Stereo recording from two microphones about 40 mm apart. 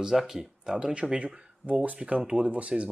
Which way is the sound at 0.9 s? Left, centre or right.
Right.